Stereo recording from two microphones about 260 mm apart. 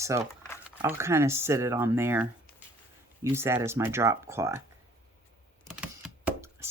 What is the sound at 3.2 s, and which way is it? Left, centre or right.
Speech, centre.